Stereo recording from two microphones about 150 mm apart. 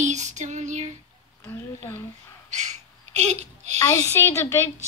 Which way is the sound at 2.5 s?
50° right (ahead or behind).